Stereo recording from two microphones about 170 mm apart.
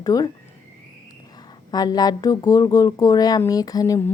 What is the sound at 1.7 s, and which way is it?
A woman's voice, 20° left (ahead or behind).